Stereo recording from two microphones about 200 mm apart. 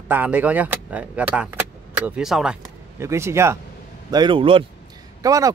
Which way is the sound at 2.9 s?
15° right (ahead or behind).